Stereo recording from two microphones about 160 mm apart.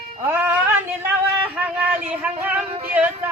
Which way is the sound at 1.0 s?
10° right (ahead or behind).